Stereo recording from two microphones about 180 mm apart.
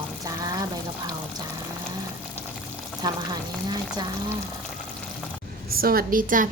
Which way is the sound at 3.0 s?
20° right (ahead or behind).